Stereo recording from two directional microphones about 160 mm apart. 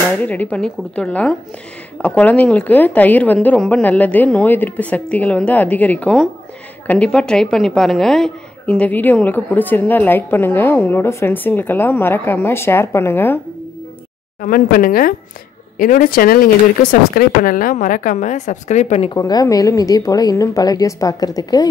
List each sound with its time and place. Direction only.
0.2 s a woman's voice: 10° left (ahead or behind)
14.4 s a woman's voice: 60° left (ahead or behind); by 19.1 s 40° left (ahead or behind)
19.1 s a woman's voice: 25° left (ahead or behind)